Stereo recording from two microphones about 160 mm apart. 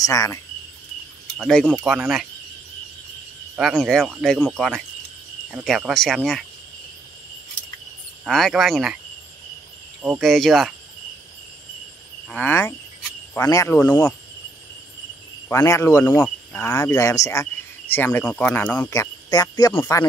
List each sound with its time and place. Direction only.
0.0 s speech: 20° left (ahead or behind)
1.4 s speech: 5° left (ahead or behind)
3.7 s speech: centre (ahead or behind)
8.3 s speech: centre (ahead or behind)
10.2 s speech: centre (ahead or behind)
12.3 s speech: 10° left (ahead or behind)
15.4 s speech: 15° left (ahead or behind)